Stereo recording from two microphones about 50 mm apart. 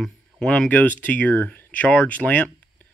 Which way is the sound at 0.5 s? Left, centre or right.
Left.